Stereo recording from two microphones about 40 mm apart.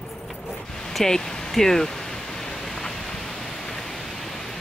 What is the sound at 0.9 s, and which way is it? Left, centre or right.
Speech, centre.